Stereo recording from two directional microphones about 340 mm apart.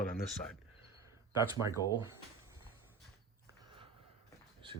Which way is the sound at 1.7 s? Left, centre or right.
Centre.